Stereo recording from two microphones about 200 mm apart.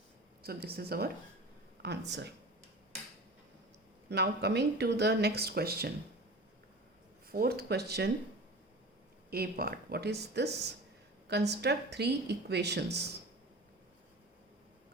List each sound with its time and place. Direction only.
0.4 s speech: 50° right (ahead or behind)
4.1 s speech: 55° right (ahead or behind)
7.3 s speech: 50° right (ahead or behind)
9.3 s speech: 50° right (ahead or behind)